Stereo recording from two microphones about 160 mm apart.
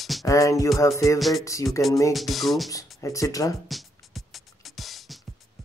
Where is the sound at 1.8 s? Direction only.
20° left (ahead or behind).